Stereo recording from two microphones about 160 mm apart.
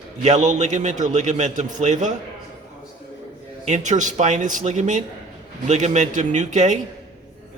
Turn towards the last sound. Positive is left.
turn(degrees=-50)  # may be behind; listen again after turning